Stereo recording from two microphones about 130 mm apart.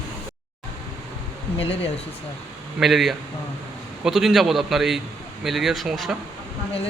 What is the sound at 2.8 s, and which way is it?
A man's voice, centre (ahead or behind).